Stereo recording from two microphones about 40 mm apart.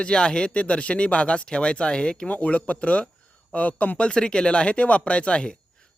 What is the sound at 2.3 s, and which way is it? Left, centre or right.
Speech, left.